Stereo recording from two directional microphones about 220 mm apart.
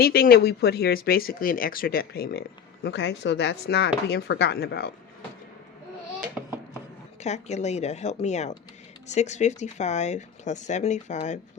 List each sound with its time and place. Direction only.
0.0 s speech: 45° left (ahead or behind)
6.4 s a sound: 5° right (ahead or behind)
7.2 s speech: 30° left (ahead or behind)